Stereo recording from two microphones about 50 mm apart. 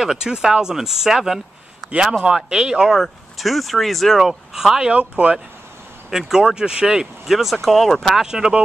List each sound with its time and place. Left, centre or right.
0.0 s speech: centre
3.0 s speech: centre
4.9 s speech: right
6.0 s speech: centre
8.3 s speech: centre